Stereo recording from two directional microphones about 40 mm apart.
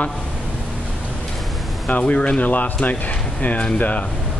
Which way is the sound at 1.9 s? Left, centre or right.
Left.